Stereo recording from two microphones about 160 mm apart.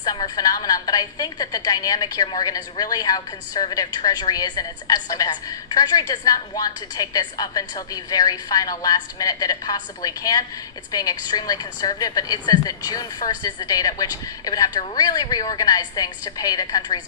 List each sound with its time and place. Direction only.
0.0 s a woman's voice: 25° left (ahead or behind)